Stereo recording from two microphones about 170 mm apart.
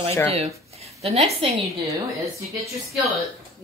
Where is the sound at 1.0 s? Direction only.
35° right (ahead or behind).